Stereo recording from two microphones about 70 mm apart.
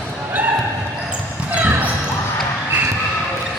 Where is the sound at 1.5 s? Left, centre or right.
Centre.